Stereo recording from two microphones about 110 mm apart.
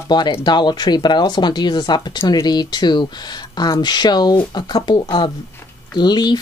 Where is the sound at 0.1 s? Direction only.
45° left (ahead or behind).